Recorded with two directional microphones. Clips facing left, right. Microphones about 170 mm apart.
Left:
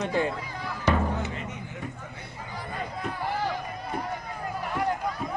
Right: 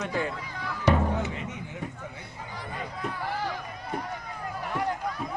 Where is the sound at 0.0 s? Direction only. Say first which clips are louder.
Left 3 dB; 25° left (ahead or behind).